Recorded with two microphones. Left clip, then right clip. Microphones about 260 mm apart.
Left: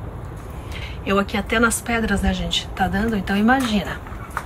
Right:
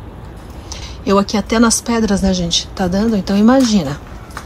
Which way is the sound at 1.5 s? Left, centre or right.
Centre.